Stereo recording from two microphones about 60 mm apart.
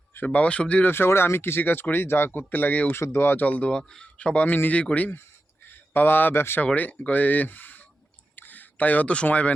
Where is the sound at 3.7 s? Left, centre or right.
Centre.